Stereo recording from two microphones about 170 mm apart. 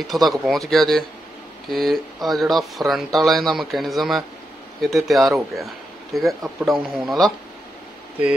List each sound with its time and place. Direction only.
0.0 s speech: centre (ahead or behind)